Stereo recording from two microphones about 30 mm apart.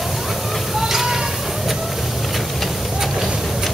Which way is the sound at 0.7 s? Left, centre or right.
Centre.